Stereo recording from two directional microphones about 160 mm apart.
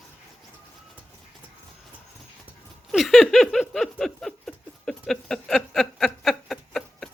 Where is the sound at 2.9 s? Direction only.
Centre (ahead or behind).